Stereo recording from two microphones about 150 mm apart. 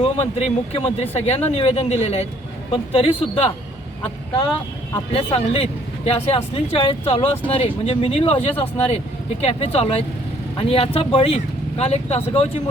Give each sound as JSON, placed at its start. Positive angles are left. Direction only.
{"t": 0.0, "sound": "speech", "side_deg": 45}
{"t": 5.1, "sound": "speech", "side_deg": 40}